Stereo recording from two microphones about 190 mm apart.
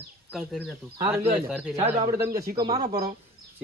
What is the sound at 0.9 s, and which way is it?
Speech, 25° right (ahead or behind).